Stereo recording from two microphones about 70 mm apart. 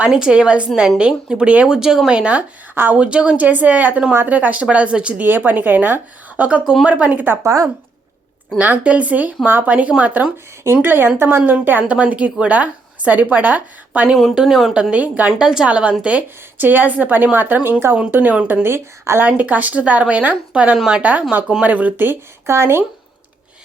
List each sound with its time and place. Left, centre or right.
0.0 s a woman's voice: centre
2.7 s speech: right
3.0 s speech: centre
7.4 s a woman's voice: right
8.5 s speech: right
10.6 s speech: right
14.3 s a woman's voice: centre; by 15.3 s right
15.3 s speech: centre; by 19.3 s right
19.3 s a woman's voice: right
21.0 s speech: right